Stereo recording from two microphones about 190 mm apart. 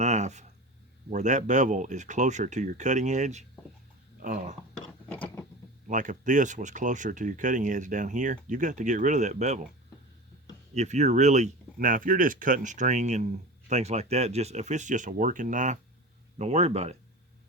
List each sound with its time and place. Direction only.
0.0 s speech: 35° right (ahead or behind)
5.9 s speech: 40° right (ahead or behind)
10.8 s speech: 35° right (ahead or behind)